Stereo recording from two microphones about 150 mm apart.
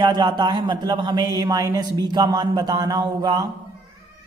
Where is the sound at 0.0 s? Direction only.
30° right (ahead or behind).